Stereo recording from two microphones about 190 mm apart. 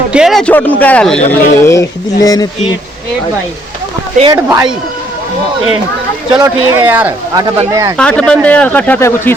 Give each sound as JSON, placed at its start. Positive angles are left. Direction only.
{"t": 0.1, "sound": "speech", "side_deg": 0}
{"t": 4.3, "sound": "speech", "side_deg": -15}
{"t": 6.3, "sound": "speech", "side_deg": -15}
{"t": 7.4, "sound": "speech", "side_deg": -20}
{"t": 7.9, "sound": "speech", "side_deg": 5}